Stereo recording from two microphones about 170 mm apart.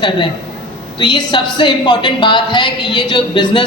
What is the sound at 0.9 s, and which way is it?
A woman's voice, 30° left (ahead or behind).